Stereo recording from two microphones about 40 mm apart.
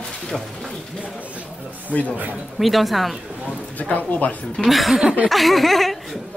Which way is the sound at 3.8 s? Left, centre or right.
Left.